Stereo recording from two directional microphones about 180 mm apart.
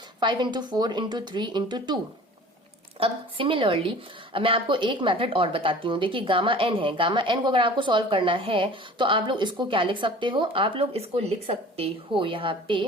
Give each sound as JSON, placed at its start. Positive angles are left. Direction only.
{"t": 0.2, "sound": "a woman's voice", "side_deg": -25}
{"t": 3.0, "sound": "a woman's voice", "side_deg": -30}